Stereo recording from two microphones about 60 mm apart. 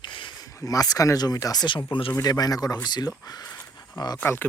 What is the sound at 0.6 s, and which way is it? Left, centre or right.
Speech, left.